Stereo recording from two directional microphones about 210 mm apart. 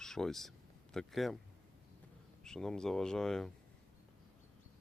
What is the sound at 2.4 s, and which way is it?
Speech, centre (ahead or behind).